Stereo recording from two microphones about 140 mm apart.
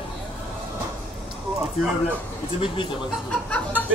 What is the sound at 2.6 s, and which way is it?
Speech, 40° left (ahead or behind).